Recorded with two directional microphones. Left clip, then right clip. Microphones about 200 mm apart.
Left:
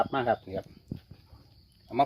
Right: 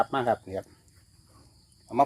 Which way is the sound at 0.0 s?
5° right (ahead or behind).